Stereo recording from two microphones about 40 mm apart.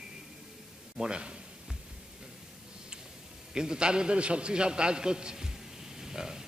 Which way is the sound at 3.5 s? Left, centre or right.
Centre.